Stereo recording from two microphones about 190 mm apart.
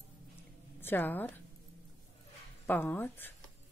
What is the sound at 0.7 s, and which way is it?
Speech, 10° left (ahead or behind).